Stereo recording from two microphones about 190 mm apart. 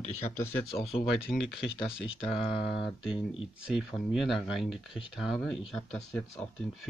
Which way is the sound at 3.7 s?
5° right (ahead or behind).